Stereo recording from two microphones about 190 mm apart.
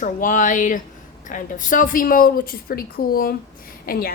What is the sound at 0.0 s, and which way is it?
A woman's voice, 45° left (ahead or behind).